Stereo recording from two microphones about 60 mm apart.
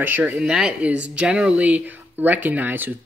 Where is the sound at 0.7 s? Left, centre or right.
Right.